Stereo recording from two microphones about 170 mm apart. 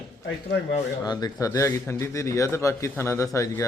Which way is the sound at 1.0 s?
25° left (ahead or behind).